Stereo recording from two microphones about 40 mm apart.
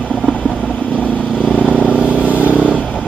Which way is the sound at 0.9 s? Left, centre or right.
Left.